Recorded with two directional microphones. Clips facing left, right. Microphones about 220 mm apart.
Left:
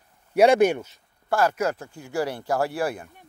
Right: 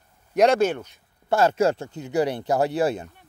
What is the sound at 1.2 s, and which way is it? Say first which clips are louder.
Speech: right 3 dB; 25° right (ahead or behind).